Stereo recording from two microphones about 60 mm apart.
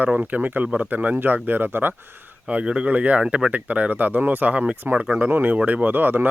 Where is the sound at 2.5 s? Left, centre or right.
Centre.